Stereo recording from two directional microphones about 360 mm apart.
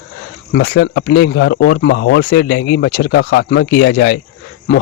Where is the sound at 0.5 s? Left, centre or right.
Left.